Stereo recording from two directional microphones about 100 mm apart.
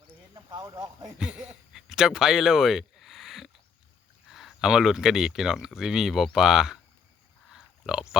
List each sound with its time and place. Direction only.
0.3 s speech: 40° right (ahead or behind)
1.2 s speech: 10° right (ahead or behind)
7.5 s pig: 5° right (ahead or behind)